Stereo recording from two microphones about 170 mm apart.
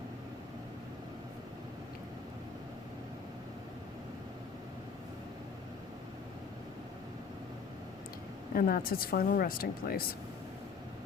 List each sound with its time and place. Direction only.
8.5 s speech: 60° left (ahead or behind)